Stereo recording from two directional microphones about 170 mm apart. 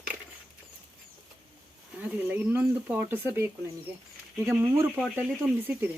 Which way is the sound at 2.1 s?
10° right (ahead or behind).